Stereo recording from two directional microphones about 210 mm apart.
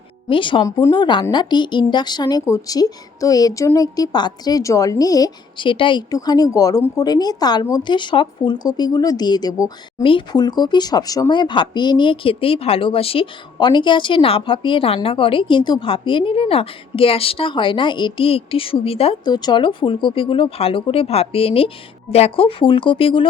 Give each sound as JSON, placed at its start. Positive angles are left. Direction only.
{"t": 0.3, "sound": "a woman's voice", "side_deg": 25}